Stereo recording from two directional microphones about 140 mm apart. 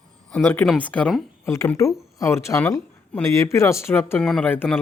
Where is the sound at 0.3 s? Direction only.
10° left (ahead or behind).